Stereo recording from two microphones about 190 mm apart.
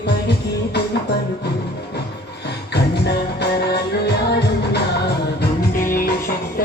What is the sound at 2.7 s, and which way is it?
Music, 60° left (ahead or behind).